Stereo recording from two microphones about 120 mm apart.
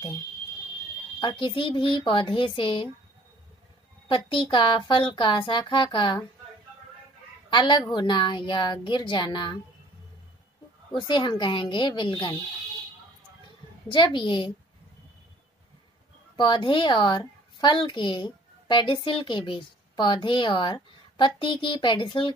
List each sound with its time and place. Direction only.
1.2 s a woman's voice: 45° left (ahead or behind)
4.1 s a woman's voice: 45° left (ahead or behind)
7.4 s a woman's voice: 40° left (ahead or behind)
10.9 s speech: 40° left (ahead or behind)
13.8 s speech: 40° left (ahead or behind)
16.3 s a child's voice: 40° left (ahead or behind)